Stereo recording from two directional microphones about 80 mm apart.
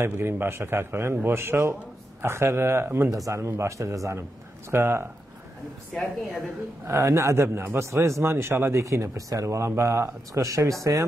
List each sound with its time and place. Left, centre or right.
0.0 s a man's voice: right
6.9 s a man's voice: right